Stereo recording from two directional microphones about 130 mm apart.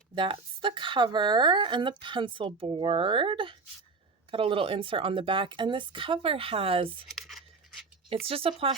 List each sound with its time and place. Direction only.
0.1 s speech: 40° right (ahead or behind)
7.1 s tearing: centre (ahead or behind)
8.1 s speech: 45° right (ahead or behind)